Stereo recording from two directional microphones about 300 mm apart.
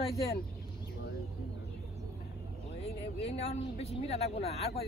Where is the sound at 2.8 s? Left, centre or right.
Centre.